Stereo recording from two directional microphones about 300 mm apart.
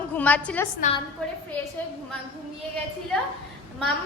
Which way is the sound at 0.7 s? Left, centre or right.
Left.